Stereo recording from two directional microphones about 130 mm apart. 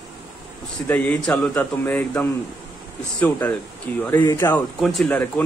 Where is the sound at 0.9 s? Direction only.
10° left (ahead or behind).